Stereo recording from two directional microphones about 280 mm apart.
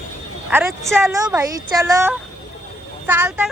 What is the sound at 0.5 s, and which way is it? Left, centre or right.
A woman's voice, centre.